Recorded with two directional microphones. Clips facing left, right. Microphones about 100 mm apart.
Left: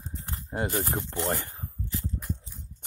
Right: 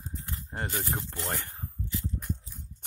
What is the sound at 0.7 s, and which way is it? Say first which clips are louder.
Speech: left 4 dB; 40° left (ahead or behind).